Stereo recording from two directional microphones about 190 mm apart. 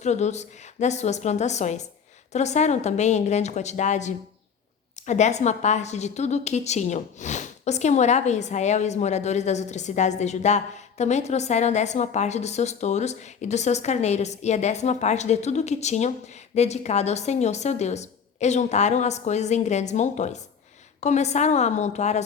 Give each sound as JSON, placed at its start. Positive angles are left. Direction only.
{"t": 0.0, "sound": "a woman's voice", "side_deg": 35}